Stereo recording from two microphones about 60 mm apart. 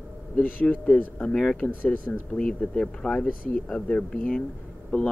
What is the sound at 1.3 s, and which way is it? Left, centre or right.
Speech, centre.